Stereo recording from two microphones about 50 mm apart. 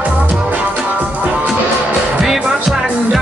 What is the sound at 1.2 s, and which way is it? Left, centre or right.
Music, right.